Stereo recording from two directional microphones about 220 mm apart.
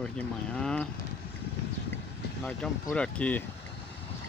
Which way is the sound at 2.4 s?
5° left (ahead or behind).